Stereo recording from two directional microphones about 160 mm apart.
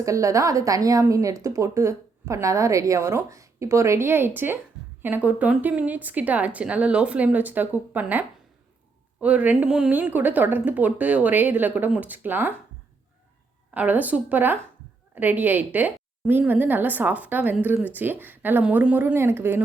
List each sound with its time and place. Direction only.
0.0 s a woman's voice: 20° right (ahead or behind)
9.2 s a woman's voice: 10° right (ahead or behind)
13.7 s a woman's voice: 10° right (ahead or behind)